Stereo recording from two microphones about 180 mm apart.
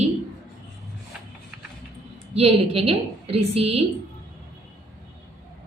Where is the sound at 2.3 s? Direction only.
35° right (ahead or behind).